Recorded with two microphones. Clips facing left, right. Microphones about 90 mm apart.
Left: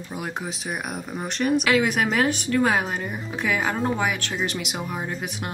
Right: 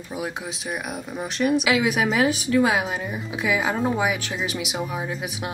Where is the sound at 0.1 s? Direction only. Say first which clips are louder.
Right 1 dB; centre (ahead or behind).